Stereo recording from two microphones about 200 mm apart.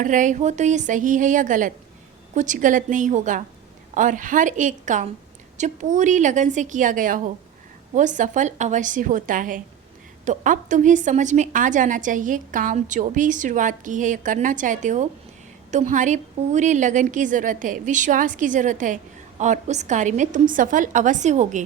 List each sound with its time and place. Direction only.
0.0 s a woman's voice: 40° right (ahead or behind)